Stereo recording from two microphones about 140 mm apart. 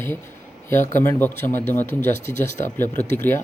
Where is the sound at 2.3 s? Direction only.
60° left (ahead or behind).